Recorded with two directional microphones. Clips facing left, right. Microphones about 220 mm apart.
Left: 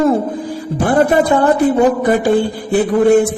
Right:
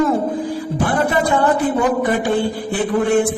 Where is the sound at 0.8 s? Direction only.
45° left (ahead or behind).